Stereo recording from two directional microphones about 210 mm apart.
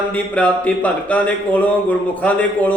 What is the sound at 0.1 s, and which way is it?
Speech, 5° left (ahead or behind).